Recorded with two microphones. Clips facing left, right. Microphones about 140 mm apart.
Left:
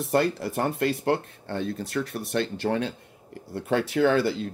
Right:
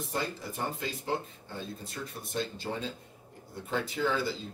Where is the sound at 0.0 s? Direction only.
70° left (ahead or behind).